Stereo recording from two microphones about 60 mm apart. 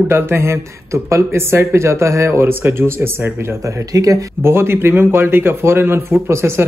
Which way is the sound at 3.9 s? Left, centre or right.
Right.